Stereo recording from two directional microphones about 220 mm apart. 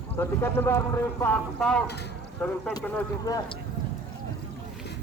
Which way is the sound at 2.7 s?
15° left (ahead or behind).